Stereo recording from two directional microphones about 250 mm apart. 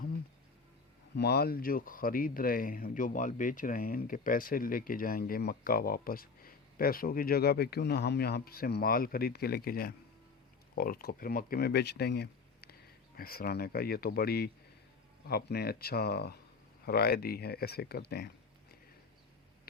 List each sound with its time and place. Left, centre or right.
1.1 s speech: left